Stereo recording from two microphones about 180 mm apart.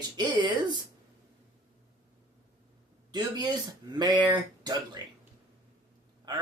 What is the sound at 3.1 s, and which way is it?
Speech, 25° right (ahead or behind).